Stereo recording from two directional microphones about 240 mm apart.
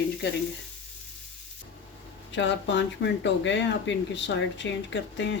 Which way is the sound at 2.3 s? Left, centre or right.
Left.